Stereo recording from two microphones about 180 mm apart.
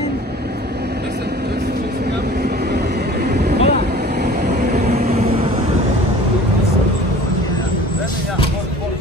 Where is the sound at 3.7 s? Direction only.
65° right (ahead or behind).